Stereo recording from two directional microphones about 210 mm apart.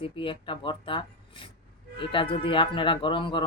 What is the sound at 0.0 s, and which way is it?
Speech, 25° left (ahead or behind).